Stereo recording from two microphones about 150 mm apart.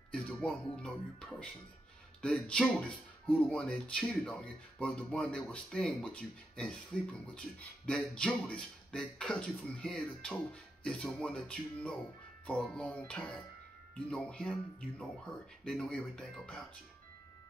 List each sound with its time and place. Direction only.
0.1 s speech: 5° left (ahead or behind)
15.6 s speech: 5° left (ahead or behind)